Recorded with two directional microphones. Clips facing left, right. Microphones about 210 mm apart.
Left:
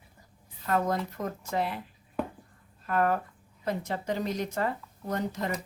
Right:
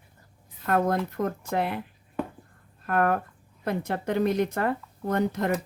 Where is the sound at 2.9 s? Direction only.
60° right (ahead or behind).